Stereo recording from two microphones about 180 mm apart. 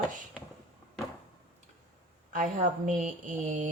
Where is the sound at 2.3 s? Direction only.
45° right (ahead or behind).